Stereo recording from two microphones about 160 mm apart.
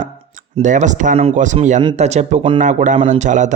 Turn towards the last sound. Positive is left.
turn(degrees=-50)  # may be behind; listen again after turning